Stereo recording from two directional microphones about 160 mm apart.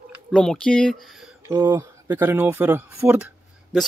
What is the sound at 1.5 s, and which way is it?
Speech, 15° right (ahead or behind).